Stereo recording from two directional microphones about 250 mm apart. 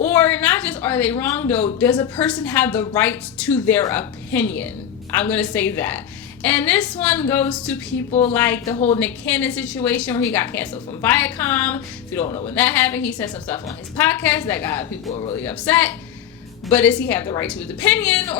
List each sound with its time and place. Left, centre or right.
0.0 s a sound: centre
2.1 s a woman's voice: centre
8.7 s a woman's voice: left
9.0 s a woman's voice: centre
15.1 s a woman's voice: left
15.4 s a woman's voice: centre